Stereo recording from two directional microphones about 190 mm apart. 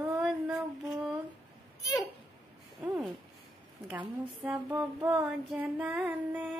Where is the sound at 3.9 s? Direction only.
10° right (ahead or behind).